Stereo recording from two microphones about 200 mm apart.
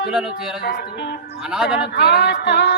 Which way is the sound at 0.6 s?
55° left (ahead or behind).